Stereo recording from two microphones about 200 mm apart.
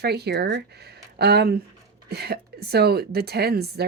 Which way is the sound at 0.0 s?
55° right (ahead or behind).